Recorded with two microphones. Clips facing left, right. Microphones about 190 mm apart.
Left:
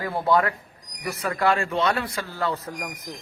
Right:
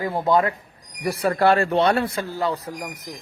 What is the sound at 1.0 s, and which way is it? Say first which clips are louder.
Speech: right 5 dB; 30° right (ahead or behind).